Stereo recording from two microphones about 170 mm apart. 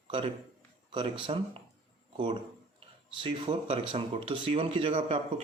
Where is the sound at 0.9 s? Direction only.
30° right (ahead or behind).